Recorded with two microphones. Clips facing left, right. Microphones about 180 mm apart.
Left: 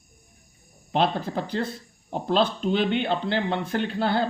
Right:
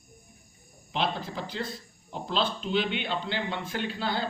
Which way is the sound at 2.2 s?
50° left (ahead or behind).